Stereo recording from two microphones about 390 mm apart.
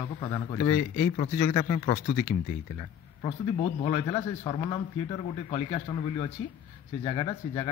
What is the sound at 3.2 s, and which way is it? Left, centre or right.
A man's voice, centre.